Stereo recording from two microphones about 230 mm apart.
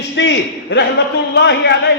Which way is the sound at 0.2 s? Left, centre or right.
Left.